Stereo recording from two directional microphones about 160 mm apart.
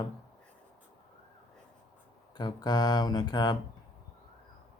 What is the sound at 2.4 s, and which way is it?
A man's voice, 25° left (ahead or behind).